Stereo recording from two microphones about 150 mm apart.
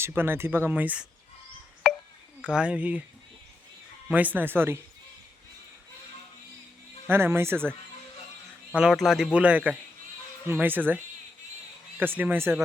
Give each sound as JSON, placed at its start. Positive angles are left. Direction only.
{"t": 0.0, "sound": "a man's voice", "side_deg": -15}
{"t": 1.8, "sound": "a sound", "side_deg": 0}
{"t": 2.4, "sound": "a man's voice", "side_deg": -5}
{"t": 4.1, "sound": "a man's voice", "side_deg": -10}
{"t": 7.1, "sound": "a man's voice", "side_deg": -15}
{"t": 8.7, "sound": "a man's voice", "side_deg": -5}